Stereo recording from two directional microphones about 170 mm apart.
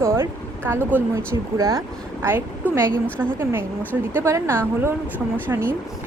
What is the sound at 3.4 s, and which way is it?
Speech, 15° right (ahead or behind).